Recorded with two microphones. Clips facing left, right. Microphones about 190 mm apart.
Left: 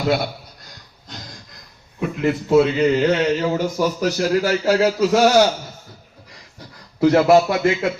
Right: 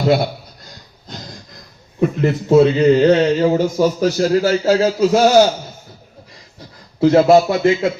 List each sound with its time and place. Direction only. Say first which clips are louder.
2.0 s a man's voice: right 4 dB; 40° right (ahead or behind); by 5.3 s 20° right (ahead or behind)
7.0 s a man's voice: right 3 dB; 25° right (ahead or behind)